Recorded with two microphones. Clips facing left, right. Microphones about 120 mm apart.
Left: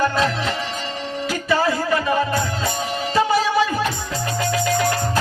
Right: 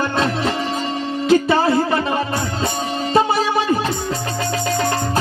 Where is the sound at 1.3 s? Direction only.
30° right (ahead or behind).